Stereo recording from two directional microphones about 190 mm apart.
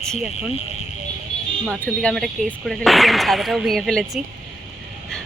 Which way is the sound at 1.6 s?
5° left (ahead or behind).